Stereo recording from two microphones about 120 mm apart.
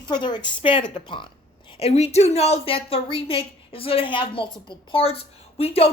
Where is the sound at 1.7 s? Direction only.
55° left (ahead or behind).